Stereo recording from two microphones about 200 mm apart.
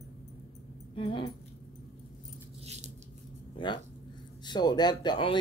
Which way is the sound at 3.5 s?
25° left (ahead or behind).